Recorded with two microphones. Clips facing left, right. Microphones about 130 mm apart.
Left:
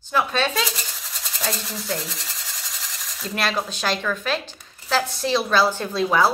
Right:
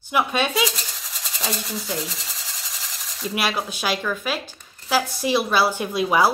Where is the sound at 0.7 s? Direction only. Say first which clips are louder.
Even; centre (ahead or behind).